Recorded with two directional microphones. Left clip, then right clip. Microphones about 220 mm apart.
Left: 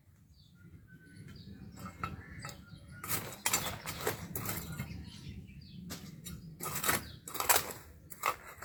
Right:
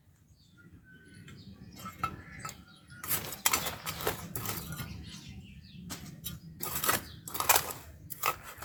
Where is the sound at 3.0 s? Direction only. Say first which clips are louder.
Right 2 dB; 10° right (ahead or behind).